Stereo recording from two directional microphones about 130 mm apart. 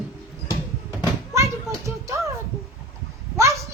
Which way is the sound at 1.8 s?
20° right (ahead or behind).